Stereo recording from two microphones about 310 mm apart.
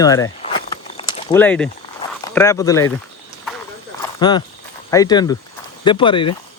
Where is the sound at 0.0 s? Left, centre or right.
Centre.